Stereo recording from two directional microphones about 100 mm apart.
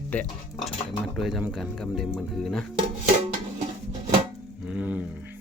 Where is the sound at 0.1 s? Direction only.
15° left (ahead or behind).